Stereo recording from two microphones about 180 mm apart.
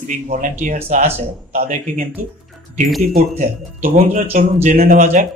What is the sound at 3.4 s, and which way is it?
Speech, 45° right (ahead or behind).